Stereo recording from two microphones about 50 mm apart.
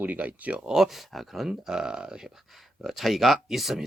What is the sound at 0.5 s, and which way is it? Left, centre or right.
Speech, centre.